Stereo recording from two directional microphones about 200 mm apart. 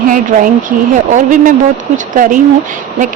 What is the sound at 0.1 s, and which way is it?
Speech, 40° right (ahead or behind).